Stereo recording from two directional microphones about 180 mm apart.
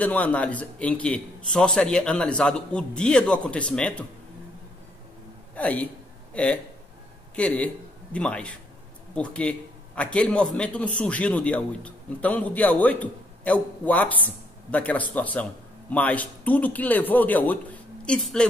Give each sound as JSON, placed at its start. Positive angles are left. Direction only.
{"t": 0.0, "sound": "a man's voice", "side_deg": 10}
{"t": 5.6, "sound": "a man's voice", "side_deg": 10}